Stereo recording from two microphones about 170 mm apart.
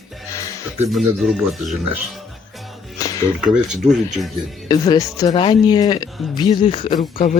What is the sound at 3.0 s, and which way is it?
Music, 20° left (ahead or behind).